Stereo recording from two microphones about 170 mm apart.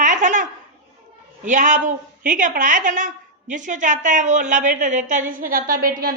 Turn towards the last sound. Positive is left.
turn(degrees=-60)  # may be behind; listen again after turning